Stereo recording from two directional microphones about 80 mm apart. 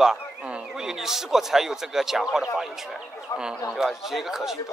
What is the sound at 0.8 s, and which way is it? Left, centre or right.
Speech, centre.